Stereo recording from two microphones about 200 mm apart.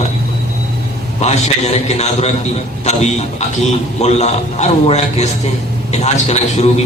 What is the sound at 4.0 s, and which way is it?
A man's voice, 35° left (ahead or behind).